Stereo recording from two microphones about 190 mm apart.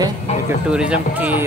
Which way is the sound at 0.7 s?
5° right (ahead or behind).